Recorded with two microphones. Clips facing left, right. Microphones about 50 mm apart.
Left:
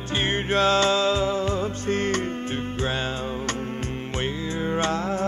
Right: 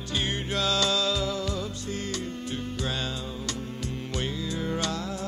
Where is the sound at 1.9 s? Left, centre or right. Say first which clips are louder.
Left 10 dB; left.